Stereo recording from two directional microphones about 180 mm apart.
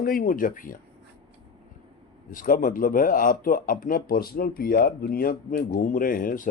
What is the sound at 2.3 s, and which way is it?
Speech, 50° left (ahead or behind).